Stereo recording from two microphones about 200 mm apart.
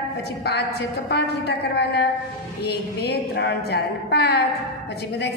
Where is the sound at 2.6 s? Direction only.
55° left (ahead or behind).